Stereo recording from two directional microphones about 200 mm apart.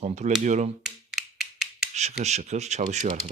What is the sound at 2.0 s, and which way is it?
Speech, 35° right (ahead or behind).